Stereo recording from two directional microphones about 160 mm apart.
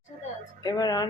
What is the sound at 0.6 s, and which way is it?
Speech, 25° left (ahead or behind).